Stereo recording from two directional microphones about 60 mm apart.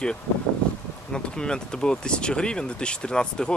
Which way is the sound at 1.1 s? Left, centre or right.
Centre.